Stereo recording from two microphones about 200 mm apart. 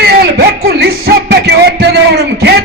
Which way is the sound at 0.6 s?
55° right (ahead or behind).